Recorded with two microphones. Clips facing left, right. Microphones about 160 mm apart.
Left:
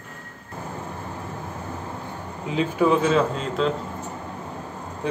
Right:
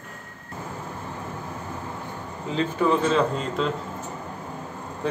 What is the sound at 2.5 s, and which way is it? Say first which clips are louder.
Speech: left 2 dB; 5° left (ahead or behind).